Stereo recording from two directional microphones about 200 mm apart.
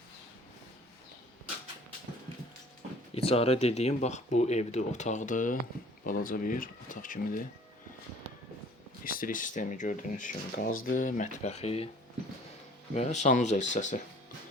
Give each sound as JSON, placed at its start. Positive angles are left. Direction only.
{"t": 3.2, "sound": "speech", "side_deg": 30}
{"t": 9.0, "sound": "speech", "side_deg": 45}
{"t": 12.9, "sound": "speech", "side_deg": 35}